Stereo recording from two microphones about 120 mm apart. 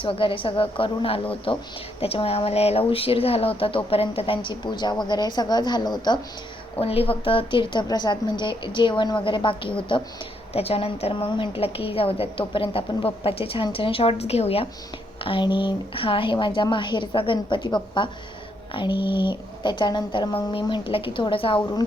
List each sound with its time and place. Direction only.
0.0 s speech: 45° left (ahead or behind)
6.7 s speech: 55° left (ahead or behind)
10.5 s speech: 55° left (ahead or behind)
15.2 s speech: 45° left (ahead or behind)